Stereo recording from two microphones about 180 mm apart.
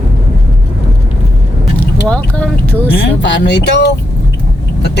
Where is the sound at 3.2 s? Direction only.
70° left (ahead or behind).